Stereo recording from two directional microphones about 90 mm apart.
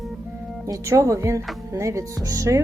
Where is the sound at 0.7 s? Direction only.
35° right (ahead or behind).